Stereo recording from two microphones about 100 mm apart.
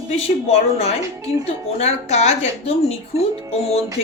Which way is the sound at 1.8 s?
90° left.